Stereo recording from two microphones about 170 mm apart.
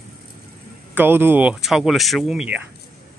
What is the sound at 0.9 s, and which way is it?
Speech, 10° right (ahead or behind).